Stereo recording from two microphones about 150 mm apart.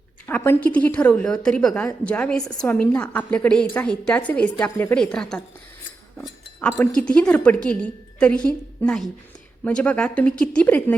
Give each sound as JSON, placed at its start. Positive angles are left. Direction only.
{"t": 0.3, "sound": "a woman's voice", "side_deg": 15}